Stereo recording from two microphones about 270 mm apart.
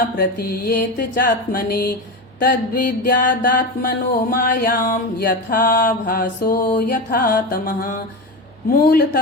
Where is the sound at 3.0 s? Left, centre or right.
Left.